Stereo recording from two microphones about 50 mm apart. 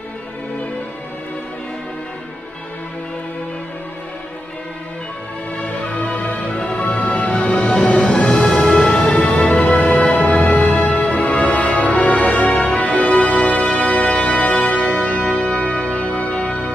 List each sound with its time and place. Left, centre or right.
5.9 s music: left
7.7 s music: centre